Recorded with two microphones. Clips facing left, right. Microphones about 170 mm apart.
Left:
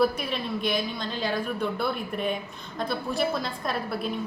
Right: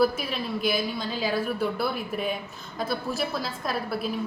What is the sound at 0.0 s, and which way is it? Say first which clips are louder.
Speech: right 1 dB; centre (ahead or behind).